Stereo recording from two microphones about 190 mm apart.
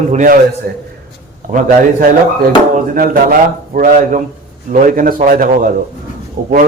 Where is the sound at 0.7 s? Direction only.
55° right (ahead or behind).